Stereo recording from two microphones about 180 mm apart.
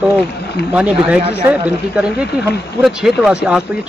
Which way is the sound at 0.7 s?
5° right (ahead or behind).